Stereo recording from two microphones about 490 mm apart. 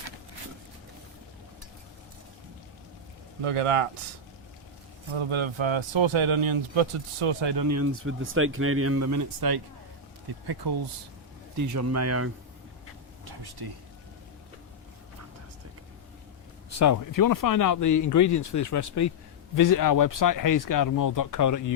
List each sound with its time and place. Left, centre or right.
3.4 s speech: right
5.1 s speech: right
7.5 s speech: right
7.8 s speech: right
11.5 s speech: right
13.2 s a sound: right
16.6 s speech: left